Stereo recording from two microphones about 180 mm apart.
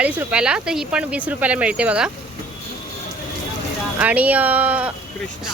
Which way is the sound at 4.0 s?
10° right (ahead or behind).